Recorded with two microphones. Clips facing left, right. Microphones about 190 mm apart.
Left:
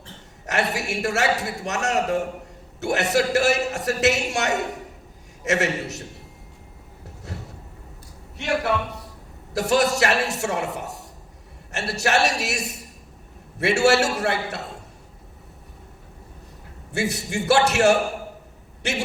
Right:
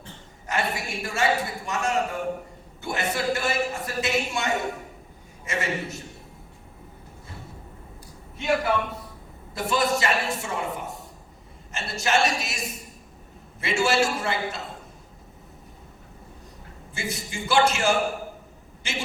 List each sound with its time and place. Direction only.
0.4 s a man's voice: 75° left (ahead or behind)
7.3 s vehicle: 75° left (ahead or behind)
8.4 s a man's voice: 75° left (ahead or behind)
16.9 s a man's voice: 70° left (ahead or behind)